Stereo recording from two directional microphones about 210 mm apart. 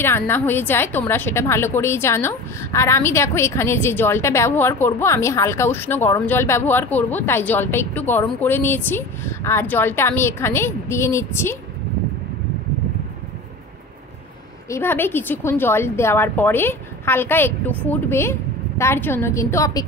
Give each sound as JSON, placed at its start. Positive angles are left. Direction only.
{"t": 0.0, "sound": "a woman's voice", "side_deg": 10}
{"t": 14.7, "sound": "a woman's voice", "side_deg": 10}